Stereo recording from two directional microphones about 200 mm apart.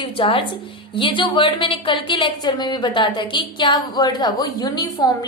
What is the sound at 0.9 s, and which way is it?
A woman's voice, 25° left (ahead or behind).